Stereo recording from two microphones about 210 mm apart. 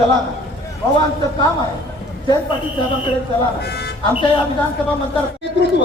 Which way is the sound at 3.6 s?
50° left (ahead or behind).